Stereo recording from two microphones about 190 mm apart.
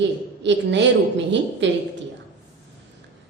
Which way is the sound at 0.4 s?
70° right (ahead or behind).